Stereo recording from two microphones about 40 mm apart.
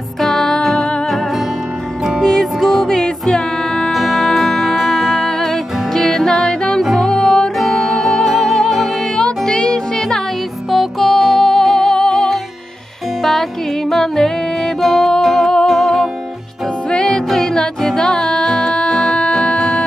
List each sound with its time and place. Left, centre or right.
0.2 s music: centre
2.2 s music: centre
7.5 s music: centre
9.1 s music: centre